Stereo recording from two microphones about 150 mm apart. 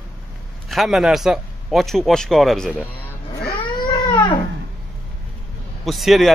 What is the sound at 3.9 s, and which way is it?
Crying, 30° left (ahead or behind).